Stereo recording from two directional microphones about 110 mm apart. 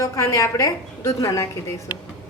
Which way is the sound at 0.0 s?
30° left (ahead or behind).